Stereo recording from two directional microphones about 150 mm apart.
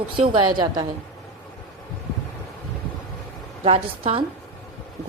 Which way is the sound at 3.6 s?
40° right (ahead or behind).